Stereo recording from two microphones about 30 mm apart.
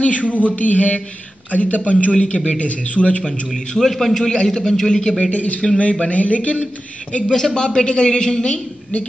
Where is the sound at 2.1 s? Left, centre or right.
Left.